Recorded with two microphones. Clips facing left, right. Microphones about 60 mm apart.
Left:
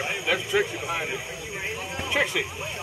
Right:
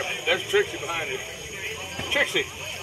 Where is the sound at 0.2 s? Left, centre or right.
Centre.